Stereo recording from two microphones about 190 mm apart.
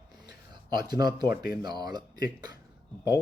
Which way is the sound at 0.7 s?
20° right (ahead or behind).